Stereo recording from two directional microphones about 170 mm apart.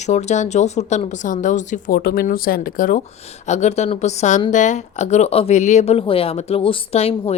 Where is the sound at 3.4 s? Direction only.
45° left (ahead or behind).